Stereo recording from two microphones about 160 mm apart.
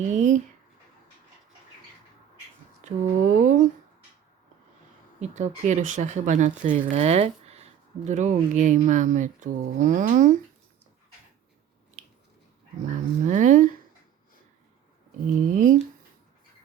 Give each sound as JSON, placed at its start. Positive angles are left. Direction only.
{"t": 0.0, "sound": "speech", "side_deg": -50}
{"t": 2.8, "sound": "a sound", "side_deg": -50}
{"t": 5.2, "sound": "speech", "side_deg": -45}
{"t": 13.2, "sound": "speech", "side_deg": -50}
{"t": 15.4, "sound": "speech", "side_deg": -55}